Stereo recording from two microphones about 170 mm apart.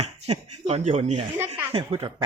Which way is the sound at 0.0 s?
40° right (ahead or behind).